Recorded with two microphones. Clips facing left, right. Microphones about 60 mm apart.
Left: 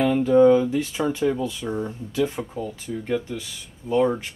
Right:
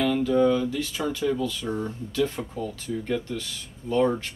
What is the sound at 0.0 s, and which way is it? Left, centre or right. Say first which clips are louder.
Speech: left 5 dB; left.